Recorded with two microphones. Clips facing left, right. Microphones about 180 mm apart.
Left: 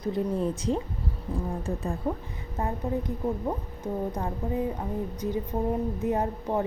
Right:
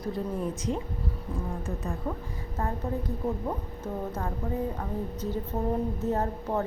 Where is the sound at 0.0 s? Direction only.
30° left (ahead or behind).